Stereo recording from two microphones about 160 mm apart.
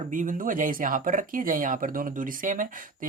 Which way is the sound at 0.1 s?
55° right (ahead or behind).